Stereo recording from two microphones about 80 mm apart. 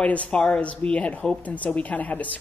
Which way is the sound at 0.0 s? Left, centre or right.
Centre.